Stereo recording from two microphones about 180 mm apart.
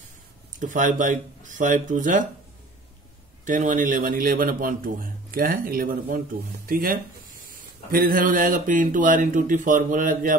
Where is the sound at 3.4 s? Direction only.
45° right (ahead or behind).